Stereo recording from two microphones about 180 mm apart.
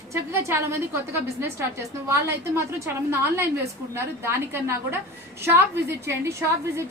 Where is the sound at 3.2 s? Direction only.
15° right (ahead or behind).